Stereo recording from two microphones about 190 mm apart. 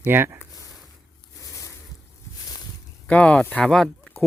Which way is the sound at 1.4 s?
15° left (ahead or behind).